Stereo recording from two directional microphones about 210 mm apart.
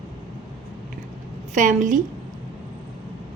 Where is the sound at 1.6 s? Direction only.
35° right (ahead or behind).